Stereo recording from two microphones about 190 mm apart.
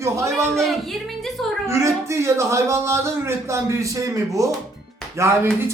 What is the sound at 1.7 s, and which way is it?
Speech, 15° right (ahead or behind).